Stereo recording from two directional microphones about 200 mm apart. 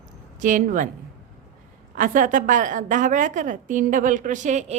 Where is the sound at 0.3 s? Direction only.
40° right (ahead or behind).